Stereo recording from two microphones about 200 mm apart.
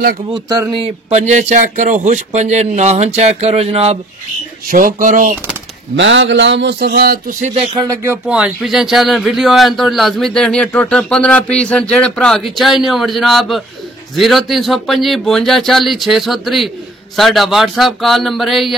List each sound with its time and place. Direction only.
0.3 s speech: 20° right (ahead or behind)
1.1 s speech: 35° right (ahead or behind)
4.6 s speech: 40° right (ahead or behind)
5.9 s a man's voice: 70° right (ahead or behind); by 7.5 s 45° right (ahead or behind)
7.5 s speech: 20° right (ahead or behind); by 18.8 s centre (ahead or behind)